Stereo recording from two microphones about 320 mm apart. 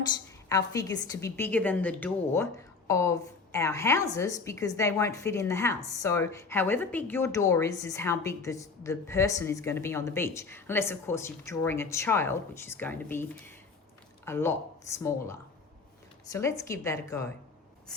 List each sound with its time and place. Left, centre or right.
0.4 s a woman's voice: centre